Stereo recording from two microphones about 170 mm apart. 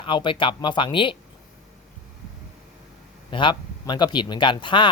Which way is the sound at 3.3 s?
30° left (ahead or behind).